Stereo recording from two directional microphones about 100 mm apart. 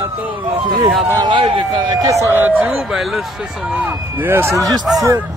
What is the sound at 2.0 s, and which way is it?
Speech, 35° right (ahead or behind).